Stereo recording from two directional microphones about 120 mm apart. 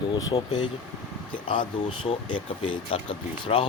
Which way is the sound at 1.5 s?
45° left (ahead or behind).